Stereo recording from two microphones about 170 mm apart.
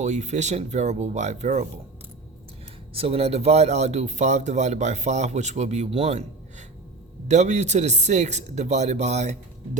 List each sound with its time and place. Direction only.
0.0 s speech: 45° right (ahead or behind)
2.9 s speech: 35° right (ahead or behind)